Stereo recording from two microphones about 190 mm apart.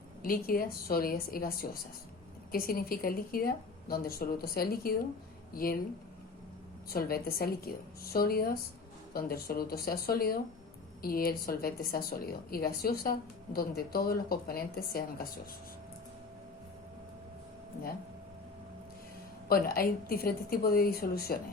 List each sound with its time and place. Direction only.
0.2 s speech: 50° left (ahead or behind)
6.9 s speech: 50° left (ahead or behind)
19.5 s speech: 50° left (ahead or behind)